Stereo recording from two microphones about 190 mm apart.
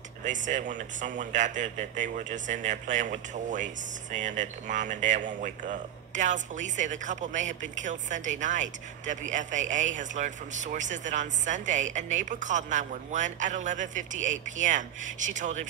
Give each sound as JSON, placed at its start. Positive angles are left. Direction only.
{"t": 0.2, "sound": "speech", "side_deg": -40}